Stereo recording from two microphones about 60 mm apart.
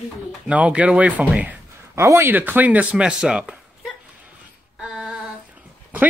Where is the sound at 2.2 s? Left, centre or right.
Right.